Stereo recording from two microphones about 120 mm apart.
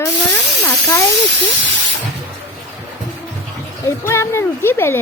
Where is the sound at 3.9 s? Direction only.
20° left (ahead or behind).